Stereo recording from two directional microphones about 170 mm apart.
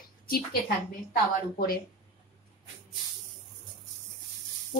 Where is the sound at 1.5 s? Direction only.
60° left (ahead or behind).